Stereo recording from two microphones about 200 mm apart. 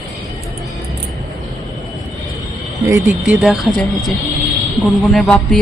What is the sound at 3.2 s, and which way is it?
A woman's voice, centre (ahead or behind).